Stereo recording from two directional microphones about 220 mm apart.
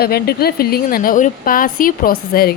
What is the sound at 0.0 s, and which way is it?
A woman's voice, 45° left (ahead or behind).